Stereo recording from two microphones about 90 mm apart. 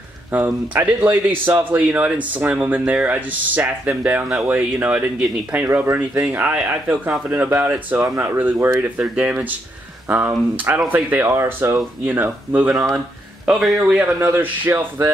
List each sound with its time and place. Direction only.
0.3 s a man's voice: 15° right (ahead or behind)
13.5 s a man's voice: 5° right (ahead or behind)
14.2 s speech: 25° right (ahead or behind)